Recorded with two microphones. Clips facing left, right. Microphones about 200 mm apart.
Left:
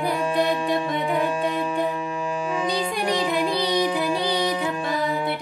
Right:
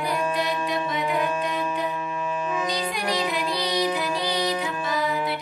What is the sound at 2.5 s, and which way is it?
Music, 25° left (ahead or behind).